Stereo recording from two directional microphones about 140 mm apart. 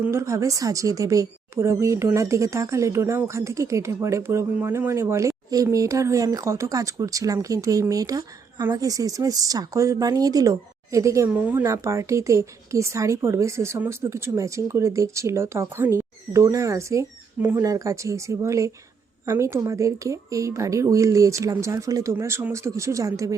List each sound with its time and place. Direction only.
0.0 s a woman's voice: 20° right (ahead or behind)